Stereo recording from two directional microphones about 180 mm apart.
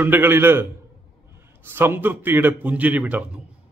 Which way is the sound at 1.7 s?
10° right (ahead or behind).